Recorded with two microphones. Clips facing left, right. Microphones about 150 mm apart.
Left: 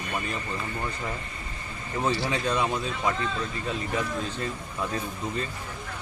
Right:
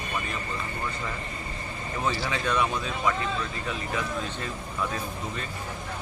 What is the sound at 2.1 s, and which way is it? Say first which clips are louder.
Speech: left 1 dB; 30° left (ahead or behind).